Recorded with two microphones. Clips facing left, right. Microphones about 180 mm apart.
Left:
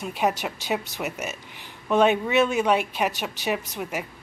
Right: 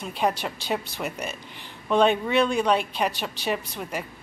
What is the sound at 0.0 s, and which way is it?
Speech, 10° left (ahead or behind).